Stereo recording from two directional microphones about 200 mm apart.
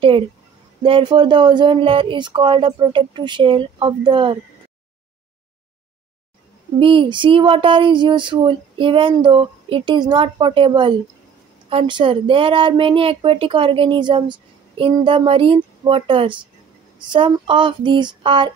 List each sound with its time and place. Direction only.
0.8 s speech: 25° right (ahead or behind)
6.8 s speech: 25° right (ahead or behind)